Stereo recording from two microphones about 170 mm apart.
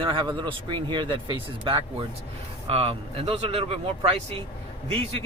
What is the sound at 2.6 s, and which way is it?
Speech, 35° right (ahead or behind).